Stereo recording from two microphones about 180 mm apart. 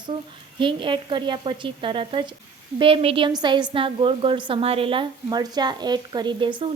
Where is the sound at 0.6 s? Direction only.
30° right (ahead or behind).